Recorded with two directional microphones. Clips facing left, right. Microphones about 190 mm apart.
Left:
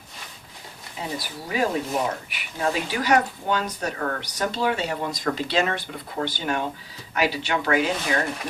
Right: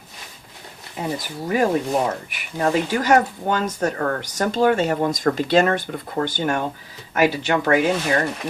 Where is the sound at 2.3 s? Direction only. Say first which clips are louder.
Right 5 dB; 45° right (ahead or behind).